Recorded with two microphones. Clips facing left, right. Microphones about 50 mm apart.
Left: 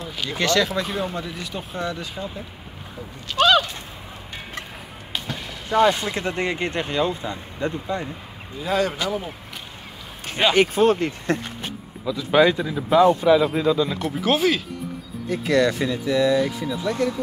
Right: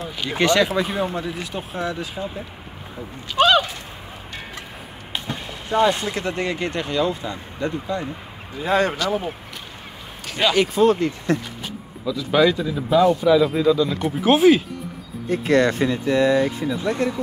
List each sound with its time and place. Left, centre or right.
0.3 s speech: right
3.3 s a sound: centre
5.1 s a sound: centre
6.0 s speech: left
8.6 s speech: right
10.2 s speech: left
14.0 s speech: centre
15.2 s speech: right